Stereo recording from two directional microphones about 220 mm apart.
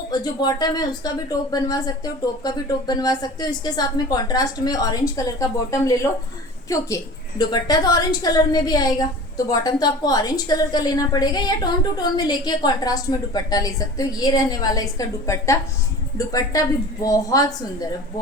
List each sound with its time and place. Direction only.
0.1 s a woman's voice: 20° left (ahead or behind)